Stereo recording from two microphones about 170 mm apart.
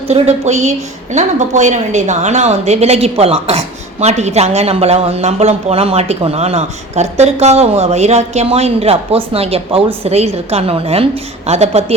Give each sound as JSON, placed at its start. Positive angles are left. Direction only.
{"t": 0.1, "sound": "speech", "side_deg": -40}